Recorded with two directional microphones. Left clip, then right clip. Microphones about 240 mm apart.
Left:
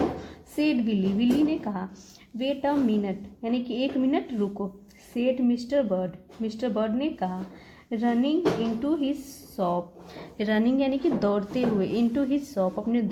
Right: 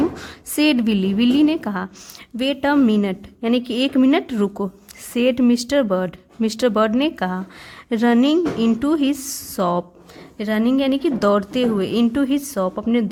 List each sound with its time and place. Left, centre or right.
0.2 s a woman's voice: right
10.3 s a woman's voice: right